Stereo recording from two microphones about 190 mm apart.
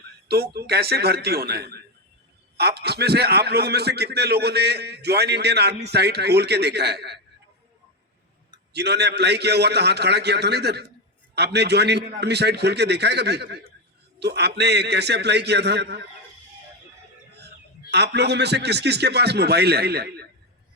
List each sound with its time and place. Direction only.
0.3 s a man's voice: 55° right (ahead or behind)
8.7 s a man's voice: 60° right (ahead or behind)
17.9 s a man's voice: 60° right (ahead or behind)